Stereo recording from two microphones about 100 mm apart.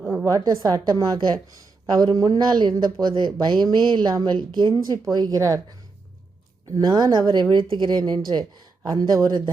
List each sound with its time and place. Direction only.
0.0 s a sound: 15° right (ahead or behind)
0.3 s a woman's voice: 35° right (ahead or behind)
6.7 s a woman's voice: 40° right (ahead or behind)